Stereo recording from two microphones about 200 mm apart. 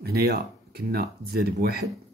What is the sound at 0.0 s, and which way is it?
Speech, 50° right (ahead or behind).